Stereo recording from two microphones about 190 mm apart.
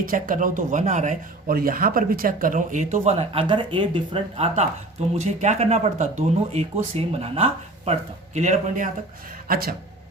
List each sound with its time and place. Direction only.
0.0 s speech: 45° right (ahead or behind)
9.5 s speech: 55° right (ahead or behind)